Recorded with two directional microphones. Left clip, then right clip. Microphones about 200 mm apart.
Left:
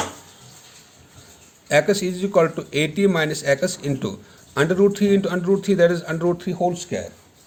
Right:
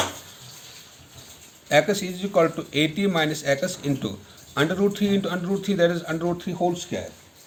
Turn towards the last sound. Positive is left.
turn(degrees=55)  # may be behind; listen again after turning